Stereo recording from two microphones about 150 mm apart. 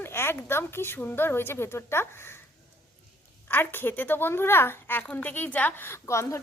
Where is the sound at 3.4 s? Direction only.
15° left (ahead or behind).